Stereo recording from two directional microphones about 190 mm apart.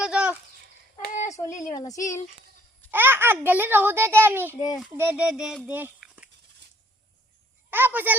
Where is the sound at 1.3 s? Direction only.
15° left (ahead or behind).